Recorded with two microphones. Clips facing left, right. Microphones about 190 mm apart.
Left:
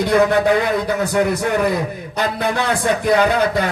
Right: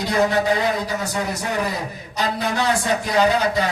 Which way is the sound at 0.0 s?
55° left (ahead or behind).